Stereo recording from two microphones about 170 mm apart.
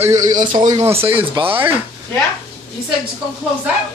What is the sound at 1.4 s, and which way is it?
Speech, 25° right (ahead or behind).